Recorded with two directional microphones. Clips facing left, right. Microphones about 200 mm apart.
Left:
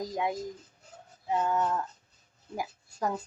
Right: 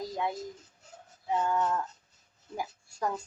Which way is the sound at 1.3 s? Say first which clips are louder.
Left 1 dB; 5° left (ahead or behind).